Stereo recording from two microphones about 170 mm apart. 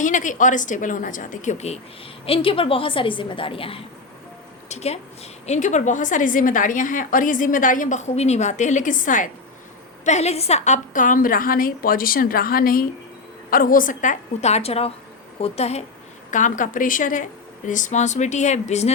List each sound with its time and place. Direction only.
0.0 s a woman's voice: 50° left (ahead or behind)
16.3 s a woman's voice: 50° left (ahead or behind)